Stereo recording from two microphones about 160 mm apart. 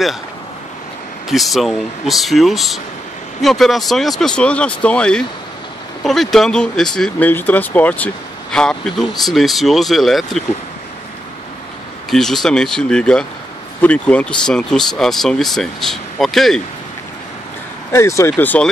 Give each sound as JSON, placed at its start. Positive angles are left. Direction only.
{"t": 1.3, "sound": "speech", "side_deg": 0}
{"t": 12.1, "sound": "speech", "side_deg": 0}
{"t": 17.9, "sound": "speech", "side_deg": 15}